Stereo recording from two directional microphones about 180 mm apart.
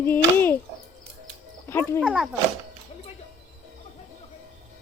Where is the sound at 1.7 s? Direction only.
10° left (ahead or behind).